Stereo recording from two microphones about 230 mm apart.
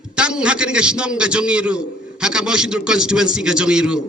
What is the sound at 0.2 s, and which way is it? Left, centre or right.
A man's voice, centre.